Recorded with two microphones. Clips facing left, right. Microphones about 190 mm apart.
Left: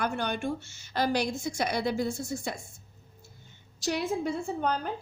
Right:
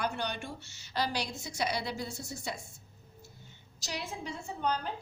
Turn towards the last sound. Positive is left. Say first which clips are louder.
# left 4 dB
turn(degrees=50)  # may be behind; listen again after turning